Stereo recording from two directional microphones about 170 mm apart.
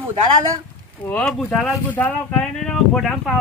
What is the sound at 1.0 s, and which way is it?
Speech, 5° left (ahead or behind).